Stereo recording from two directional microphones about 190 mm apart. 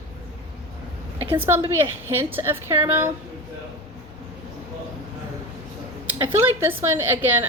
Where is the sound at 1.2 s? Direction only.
10° right (ahead or behind).